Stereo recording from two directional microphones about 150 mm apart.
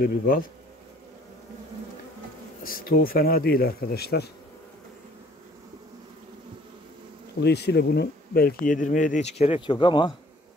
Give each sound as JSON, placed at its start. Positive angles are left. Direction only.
{"t": 0.0, "sound": "speech", "side_deg": 75}
{"t": 2.6, "sound": "speech", "side_deg": 70}
{"t": 7.4, "sound": "speech", "side_deg": 90}